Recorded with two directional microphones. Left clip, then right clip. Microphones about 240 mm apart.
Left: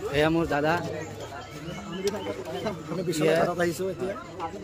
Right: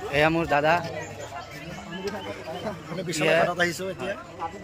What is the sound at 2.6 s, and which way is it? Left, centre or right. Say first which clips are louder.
A man's voice: left 3 dB; centre.